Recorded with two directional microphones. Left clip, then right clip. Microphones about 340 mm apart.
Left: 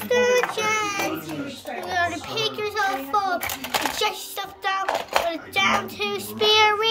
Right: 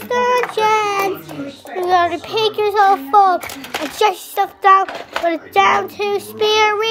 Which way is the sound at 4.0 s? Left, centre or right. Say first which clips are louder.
Right 10 dB; centre.